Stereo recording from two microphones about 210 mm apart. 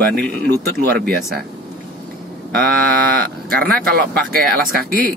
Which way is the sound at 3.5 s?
45° right (ahead or behind).